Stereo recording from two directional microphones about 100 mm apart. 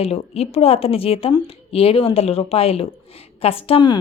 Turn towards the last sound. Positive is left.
turn(degrees=70)  # may be behind; listen again after turning